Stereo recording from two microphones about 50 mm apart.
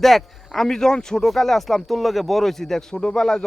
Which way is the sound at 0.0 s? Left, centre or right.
Centre.